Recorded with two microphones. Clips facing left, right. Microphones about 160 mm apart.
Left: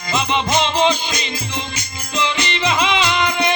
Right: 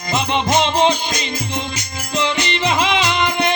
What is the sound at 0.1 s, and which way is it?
Music, 50° right (ahead or behind).